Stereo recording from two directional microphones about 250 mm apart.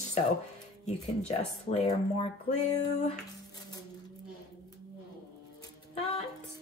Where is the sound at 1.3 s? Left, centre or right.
Left.